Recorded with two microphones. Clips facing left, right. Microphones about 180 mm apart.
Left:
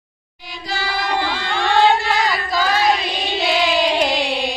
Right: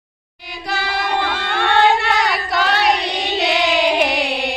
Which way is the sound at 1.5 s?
65° right (ahead or behind).